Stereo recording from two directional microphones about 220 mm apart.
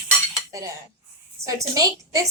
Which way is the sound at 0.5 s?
15° right (ahead or behind).